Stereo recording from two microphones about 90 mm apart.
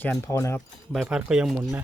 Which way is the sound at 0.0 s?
25° left (ahead or behind).